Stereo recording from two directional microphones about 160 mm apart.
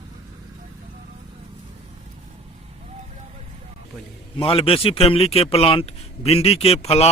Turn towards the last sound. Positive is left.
turn(degrees=40)  # may be behind; listen again after turning